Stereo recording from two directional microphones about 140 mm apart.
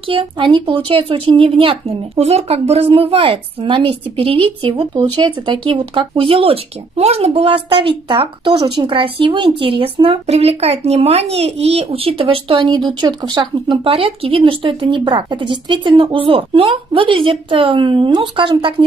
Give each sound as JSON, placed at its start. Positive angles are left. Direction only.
{"t": 0.1, "sound": "a woman's voice", "side_deg": -40}